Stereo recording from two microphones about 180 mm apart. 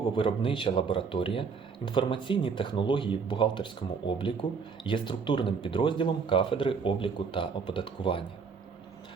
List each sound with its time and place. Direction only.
0.2 s speech: 30° left (ahead or behind)